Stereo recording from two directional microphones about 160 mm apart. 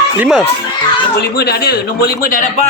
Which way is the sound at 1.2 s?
80° left.